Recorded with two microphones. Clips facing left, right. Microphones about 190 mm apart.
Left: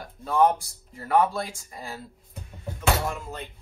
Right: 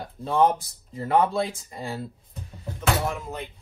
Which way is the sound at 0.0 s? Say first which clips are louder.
Even; 30° right (ahead or behind).